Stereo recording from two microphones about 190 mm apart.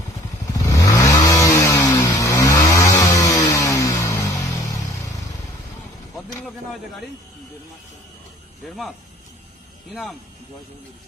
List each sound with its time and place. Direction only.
0.4 s vehicle: 20° left (ahead or behind)
6.1 s a sound: centre (ahead or behind)
8.6 s speech: centre (ahead or behind)